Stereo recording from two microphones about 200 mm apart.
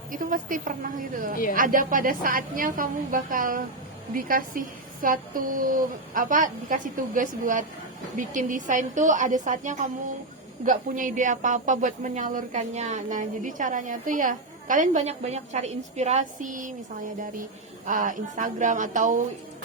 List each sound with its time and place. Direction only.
0.1 s a woman's voice: 45° right (ahead or behind)
17.8 s speech: 40° right (ahead or behind)